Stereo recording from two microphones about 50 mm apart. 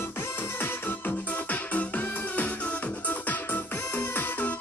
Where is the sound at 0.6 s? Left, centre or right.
Left.